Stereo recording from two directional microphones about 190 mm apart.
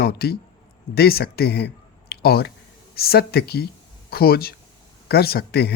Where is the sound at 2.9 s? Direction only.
55° left (ahead or behind).